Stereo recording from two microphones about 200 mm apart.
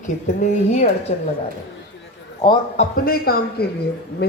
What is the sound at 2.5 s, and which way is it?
Speech, 35° left (ahead or behind).